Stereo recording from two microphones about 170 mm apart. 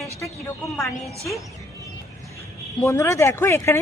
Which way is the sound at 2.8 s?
15° left (ahead or behind).